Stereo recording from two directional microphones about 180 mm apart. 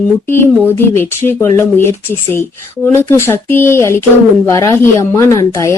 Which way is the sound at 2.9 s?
15° left (ahead or behind).